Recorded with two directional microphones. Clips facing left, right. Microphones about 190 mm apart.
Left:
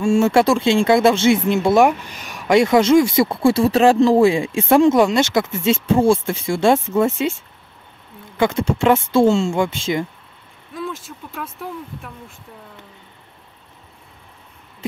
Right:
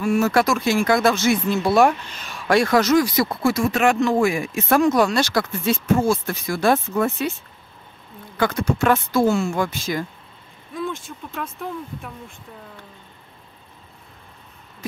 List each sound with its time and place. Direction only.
0.0 s speech: 25° left (ahead or behind)
8.4 s speech: 25° left (ahead or behind)
10.7 s speech: centre (ahead or behind)